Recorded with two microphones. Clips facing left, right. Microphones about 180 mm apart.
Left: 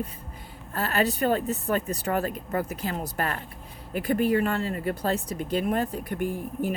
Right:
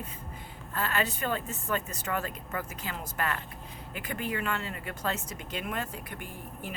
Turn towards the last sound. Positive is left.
turn(degrees=40)  # may be behind; listen again after turning